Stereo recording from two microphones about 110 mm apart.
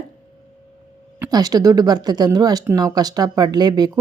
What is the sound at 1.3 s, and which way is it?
Speech, 35° right (ahead or behind).